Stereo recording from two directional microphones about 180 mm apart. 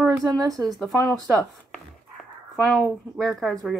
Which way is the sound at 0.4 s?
20° right (ahead or behind).